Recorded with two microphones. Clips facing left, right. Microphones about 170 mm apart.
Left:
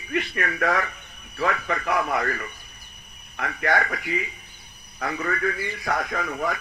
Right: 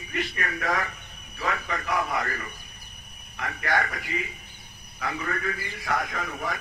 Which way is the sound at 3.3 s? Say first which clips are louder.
Left 4 dB; 55° left (ahead or behind).